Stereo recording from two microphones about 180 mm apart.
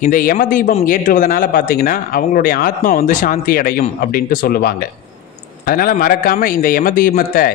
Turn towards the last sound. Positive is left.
turn(degrees=55)  # may be behind; listen again after turning